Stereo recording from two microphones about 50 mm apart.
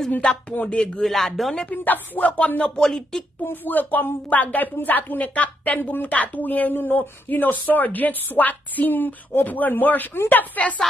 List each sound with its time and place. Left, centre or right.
0.2 s speech: centre
1.0 s speech: centre
1.7 s speech: left
2.8 s speech: centre
3.6 s a woman's voice: left